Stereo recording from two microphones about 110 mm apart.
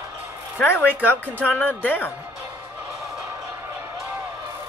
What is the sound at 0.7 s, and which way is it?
Speech, 20° left (ahead or behind).